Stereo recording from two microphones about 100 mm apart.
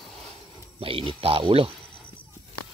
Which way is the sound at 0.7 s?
65° right (ahead or behind).